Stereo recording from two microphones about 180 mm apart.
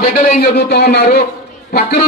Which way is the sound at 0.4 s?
65° left (ahead or behind).